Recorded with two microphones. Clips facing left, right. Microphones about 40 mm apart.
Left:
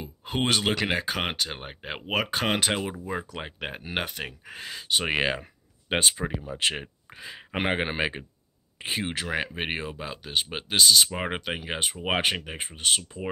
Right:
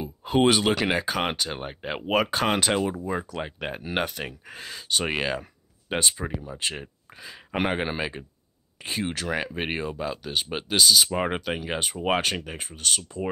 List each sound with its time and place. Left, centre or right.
0.0 s speech: centre; by 13.3 s left